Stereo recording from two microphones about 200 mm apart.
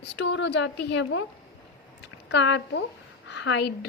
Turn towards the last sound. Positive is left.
turn(degrees=60)  # may be behind; listen again after turning